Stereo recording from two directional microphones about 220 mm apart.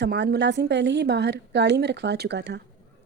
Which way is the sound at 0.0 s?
50° right (ahead or behind).